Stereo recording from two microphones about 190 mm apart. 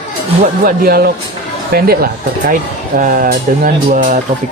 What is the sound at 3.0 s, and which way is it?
Speech, 45° right (ahead or behind).